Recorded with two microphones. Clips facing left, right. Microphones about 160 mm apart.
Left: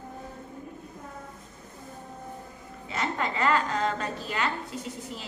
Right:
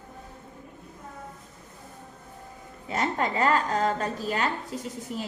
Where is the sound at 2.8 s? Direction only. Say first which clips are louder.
Right 3 dB; 45° right (ahead or behind).